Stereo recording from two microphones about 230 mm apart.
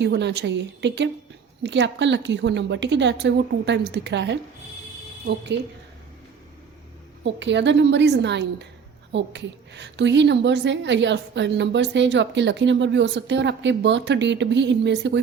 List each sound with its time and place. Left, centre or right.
0.0 s a woman's voice: right
7.3 s a woman's voice: right